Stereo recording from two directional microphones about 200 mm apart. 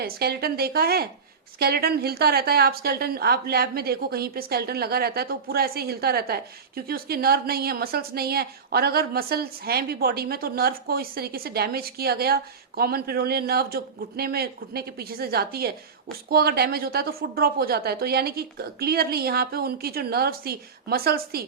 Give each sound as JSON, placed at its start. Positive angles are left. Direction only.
{"t": 0.0, "sound": "a woman's voice", "side_deg": -50}